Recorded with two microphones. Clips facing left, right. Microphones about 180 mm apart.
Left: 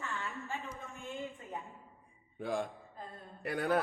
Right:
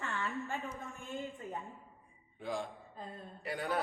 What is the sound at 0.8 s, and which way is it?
Speech, 15° left (ahead or behind).